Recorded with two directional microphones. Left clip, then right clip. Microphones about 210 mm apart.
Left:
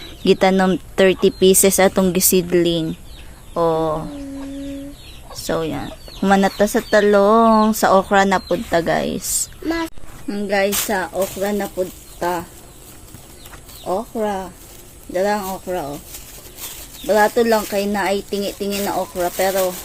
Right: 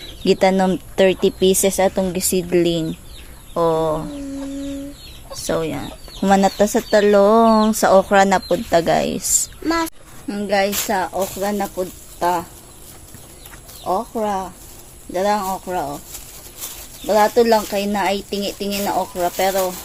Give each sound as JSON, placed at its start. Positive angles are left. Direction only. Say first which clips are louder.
{"t": 0.3, "sound": "speech", "louder": "left 1 dB", "side_deg": 5}
{"t": 2.5, "sound": "speech", "louder": "even", "side_deg": 0}
{"t": 5.5, "sound": "speech", "louder": "even", "side_deg": 0}
{"t": 9.6, "sound": "a sound", "louder": "right 2 dB", "side_deg": -55}
{"t": 10.2, "sound": "speech", "louder": "even", "side_deg": -15}
{"t": 13.8, "sound": "speech", "louder": "right 1 dB", "side_deg": -15}
{"t": 17.1, "sound": "speech", "louder": "right 1 dB", "side_deg": -15}